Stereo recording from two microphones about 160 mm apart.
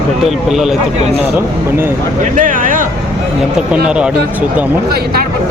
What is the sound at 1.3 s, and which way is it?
Speech, 15° right (ahead or behind).